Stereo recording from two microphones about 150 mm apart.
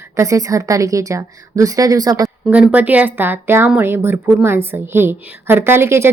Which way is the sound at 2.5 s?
10° right (ahead or behind).